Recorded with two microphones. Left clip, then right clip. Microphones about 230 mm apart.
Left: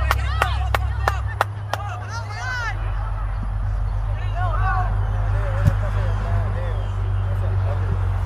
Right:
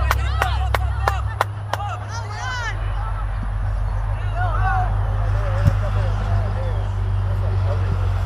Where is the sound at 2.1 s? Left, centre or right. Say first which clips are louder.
Even; left.